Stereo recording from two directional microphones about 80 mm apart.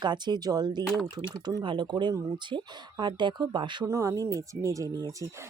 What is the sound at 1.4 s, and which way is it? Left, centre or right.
Speech, right.